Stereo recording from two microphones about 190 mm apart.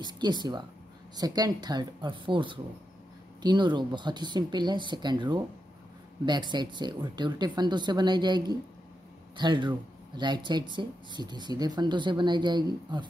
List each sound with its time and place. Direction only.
0.0 s speech: 20° right (ahead or behind)